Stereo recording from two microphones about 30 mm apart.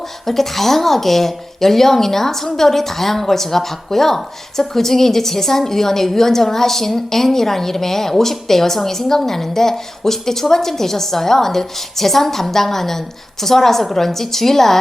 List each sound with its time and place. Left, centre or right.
0.3 s a woman's voice: centre